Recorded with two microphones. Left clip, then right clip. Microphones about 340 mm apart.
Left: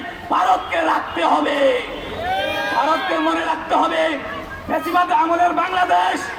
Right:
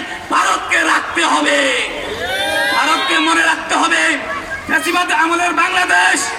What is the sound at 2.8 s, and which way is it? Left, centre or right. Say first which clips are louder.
A man's voice: right 2 dB; centre.